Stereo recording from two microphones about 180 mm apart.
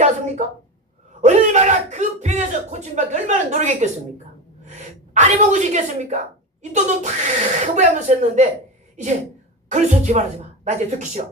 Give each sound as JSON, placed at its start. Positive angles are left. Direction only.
{"t": 0.4, "sound": "a woman's voice", "side_deg": -40}
{"t": 9.6, "sound": "speech", "side_deg": -45}